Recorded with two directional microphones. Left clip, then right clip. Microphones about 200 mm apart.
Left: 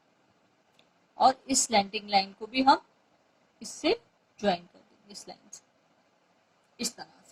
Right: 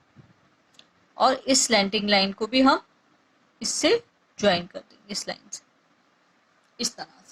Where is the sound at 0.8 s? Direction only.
40° right (ahead or behind).